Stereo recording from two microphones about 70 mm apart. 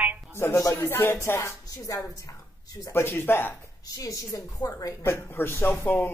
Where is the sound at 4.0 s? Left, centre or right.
Left.